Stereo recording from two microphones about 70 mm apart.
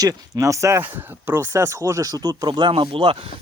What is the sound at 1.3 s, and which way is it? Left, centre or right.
Speech, right.